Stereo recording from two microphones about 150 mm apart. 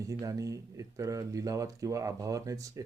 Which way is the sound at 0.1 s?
20° right (ahead or behind).